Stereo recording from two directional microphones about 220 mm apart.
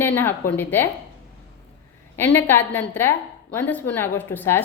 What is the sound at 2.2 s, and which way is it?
Speech, 10° left (ahead or behind).